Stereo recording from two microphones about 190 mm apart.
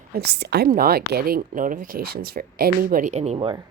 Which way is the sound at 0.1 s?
60° right (ahead or behind).